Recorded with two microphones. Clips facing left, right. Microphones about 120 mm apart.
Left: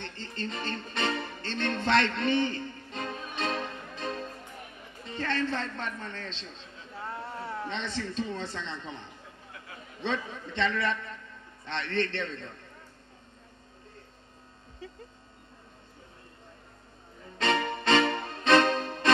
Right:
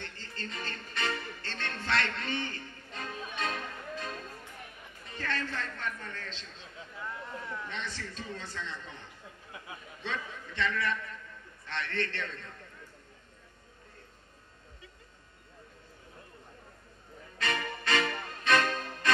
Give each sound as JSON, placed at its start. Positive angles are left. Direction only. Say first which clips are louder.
{"t": 0.0, "sound": "music", "louder": "left 6 dB", "side_deg": 20}
{"t": 5.0, "sound": "a man's voice", "louder": "left 6 dB", "side_deg": 25}
{"t": 7.0, "sound": "a sound", "louder": "left 4 dB", "side_deg": 35}
{"t": 7.6, "sound": "a man's voice", "louder": "left 6 dB", "side_deg": 25}
{"t": 17.4, "sound": "music", "louder": "left 7 dB", "side_deg": 25}